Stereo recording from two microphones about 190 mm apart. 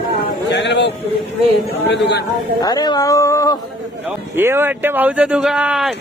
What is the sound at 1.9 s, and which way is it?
Speech, 60° left (ahead or behind).